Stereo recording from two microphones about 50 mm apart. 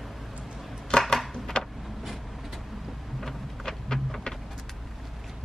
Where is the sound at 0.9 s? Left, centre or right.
Centre.